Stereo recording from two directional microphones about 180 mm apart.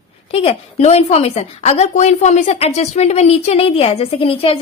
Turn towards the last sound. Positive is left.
turn(degrees=30)  # may be behind; listen again after turning